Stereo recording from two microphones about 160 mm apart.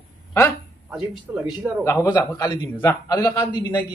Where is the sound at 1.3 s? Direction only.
10° right (ahead or behind).